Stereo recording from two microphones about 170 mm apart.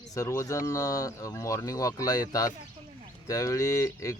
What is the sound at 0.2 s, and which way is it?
Speech, 15° left (ahead or behind).